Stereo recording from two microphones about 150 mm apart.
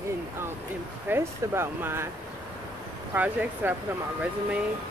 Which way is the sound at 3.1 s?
10° right (ahead or behind).